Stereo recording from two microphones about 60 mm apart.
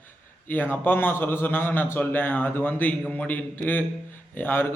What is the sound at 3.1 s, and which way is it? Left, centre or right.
A man's voice, left.